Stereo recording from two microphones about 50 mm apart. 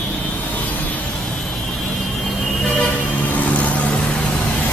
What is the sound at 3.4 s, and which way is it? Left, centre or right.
Vehicle, left.